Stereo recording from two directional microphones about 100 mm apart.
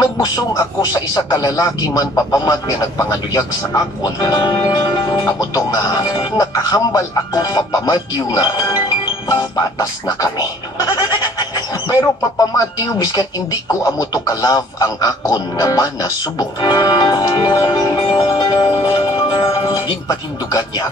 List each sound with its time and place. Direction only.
0.0 s speech: 35° left (ahead or behind)
4.6 s music: 50° left (ahead or behind)
6.3 s speech: 35° left (ahead or behind)
11.0 s goat: 40° left (ahead or behind)
11.9 s speech: 35° left (ahead or behind)
17.6 s music: 50° left (ahead or behind)
20.1 s speech: 40° left (ahead or behind)